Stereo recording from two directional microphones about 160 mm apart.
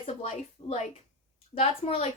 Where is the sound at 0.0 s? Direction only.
40° left (ahead or behind).